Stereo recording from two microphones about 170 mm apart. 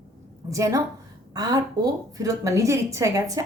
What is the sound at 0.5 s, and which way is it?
A woman's voice, 20° right (ahead or behind).